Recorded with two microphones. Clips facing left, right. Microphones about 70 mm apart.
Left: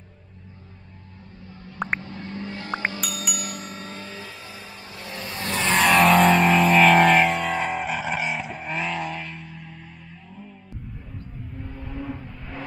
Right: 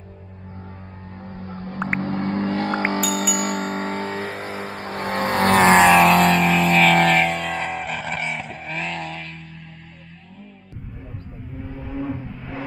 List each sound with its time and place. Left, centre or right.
1.2 s music: right
2.0 s car: right
3.3 s vehicle: right
5.9 s vehicle: centre
11.6 s vehicle: centre